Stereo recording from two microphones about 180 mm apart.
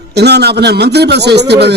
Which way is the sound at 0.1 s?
65° right (ahead or behind).